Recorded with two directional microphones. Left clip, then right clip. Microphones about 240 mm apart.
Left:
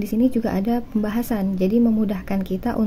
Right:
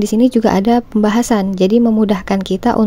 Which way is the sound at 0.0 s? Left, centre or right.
Right.